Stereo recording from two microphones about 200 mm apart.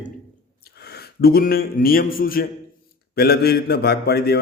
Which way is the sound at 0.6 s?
55° left (ahead or behind).